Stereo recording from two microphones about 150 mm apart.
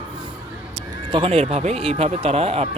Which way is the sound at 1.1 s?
35° right (ahead or behind).